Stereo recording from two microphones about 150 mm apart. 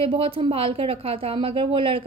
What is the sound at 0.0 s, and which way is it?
A woman's voice, 35° right (ahead or behind).